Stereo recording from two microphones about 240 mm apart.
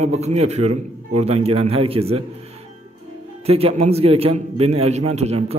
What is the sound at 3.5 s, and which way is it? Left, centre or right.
A man's voice, right.